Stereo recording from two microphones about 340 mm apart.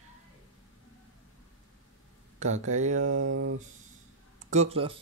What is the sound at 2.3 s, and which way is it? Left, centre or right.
Speech, centre.